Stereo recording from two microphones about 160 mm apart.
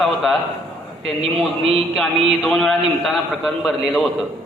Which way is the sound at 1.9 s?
Centre (ahead or behind).